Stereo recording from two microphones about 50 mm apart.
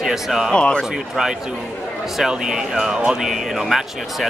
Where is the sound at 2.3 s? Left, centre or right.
Centre.